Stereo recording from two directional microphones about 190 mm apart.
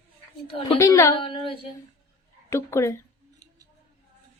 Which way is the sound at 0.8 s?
15° left (ahead or behind).